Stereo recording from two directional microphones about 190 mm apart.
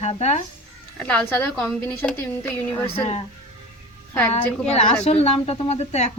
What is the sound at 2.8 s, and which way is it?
Speech, 30° left (ahead or behind).